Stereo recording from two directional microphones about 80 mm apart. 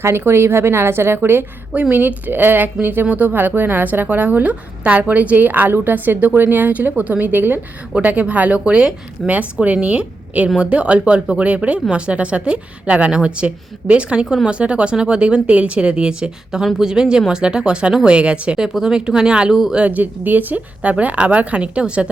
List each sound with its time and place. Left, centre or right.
0.0 s speech: right; by 19.8 s centre
19.8 s speech: right